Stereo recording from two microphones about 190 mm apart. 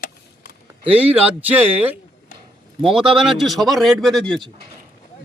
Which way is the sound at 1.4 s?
10° right (ahead or behind).